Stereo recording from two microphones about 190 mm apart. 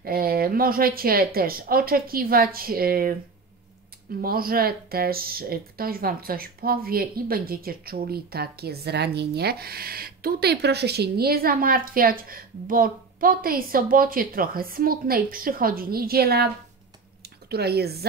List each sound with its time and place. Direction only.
0.0 s speech: 50° right (ahead or behind)
4.2 s speech: 50° right (ahead or behind)